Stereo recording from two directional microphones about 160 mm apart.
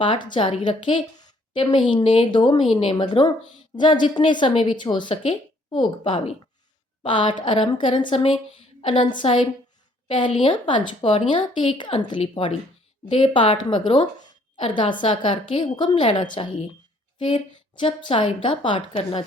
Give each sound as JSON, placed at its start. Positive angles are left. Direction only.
{"t": 0.0, "sound": "a woman's voice", "side_deg": 30}